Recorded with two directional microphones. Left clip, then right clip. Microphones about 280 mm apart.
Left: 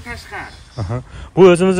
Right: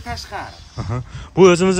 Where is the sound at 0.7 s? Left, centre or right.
Centre.